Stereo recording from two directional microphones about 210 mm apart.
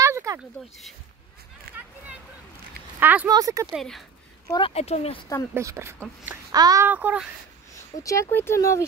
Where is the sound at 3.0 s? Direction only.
10° right (ahead or behind).